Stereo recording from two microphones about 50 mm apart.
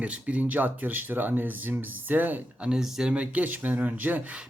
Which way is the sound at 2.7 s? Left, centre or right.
Centre.